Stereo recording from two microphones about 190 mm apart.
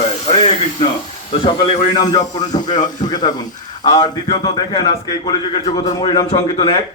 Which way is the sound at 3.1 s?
20° left (ahead or behind).